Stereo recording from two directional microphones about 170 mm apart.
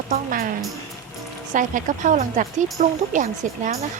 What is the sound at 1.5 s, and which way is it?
Speech, 50° right (ahead or behind).